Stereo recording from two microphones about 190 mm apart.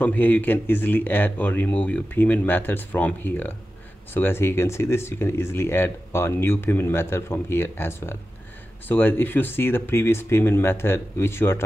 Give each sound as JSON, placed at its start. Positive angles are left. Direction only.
{"t": 0.0, "sound": "speech", "side_deg": 10}